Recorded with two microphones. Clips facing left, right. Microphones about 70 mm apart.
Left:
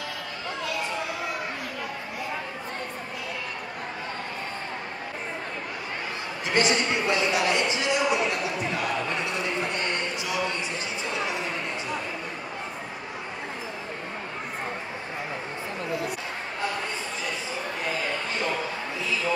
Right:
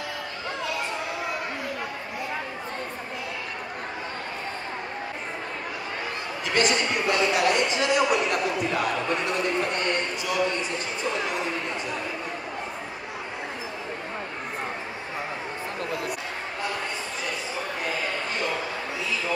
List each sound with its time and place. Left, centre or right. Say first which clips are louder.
6.4 s speech: even; right